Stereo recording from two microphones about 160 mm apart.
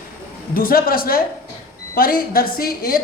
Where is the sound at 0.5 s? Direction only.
65° left (ahead or behind).